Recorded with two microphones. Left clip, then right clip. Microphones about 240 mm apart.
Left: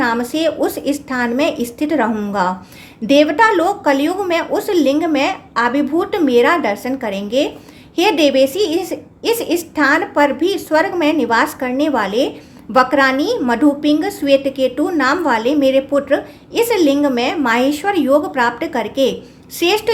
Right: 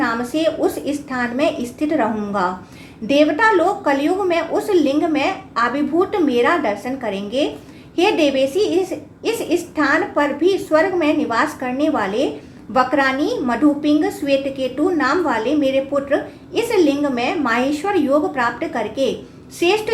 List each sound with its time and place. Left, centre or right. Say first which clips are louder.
0.0 s a woman's voice: left 2 dB; left